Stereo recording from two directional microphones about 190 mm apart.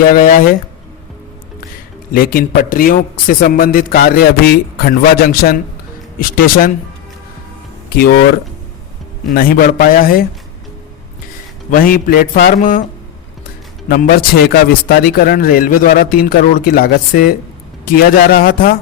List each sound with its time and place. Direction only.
0.0 s a man's voice: 50° left (ahead or behind)
2.1 s a man's voice: 50° left (ahead or behind)
7.9 s speech: 55° left (ahead or behind)
9.3 s a man's voice: 50° left (ahead or behind)
11.7 s a man's voice: 50° left (ahead or behind)
13.8 s a man's voice: 50° left (ahead or behind)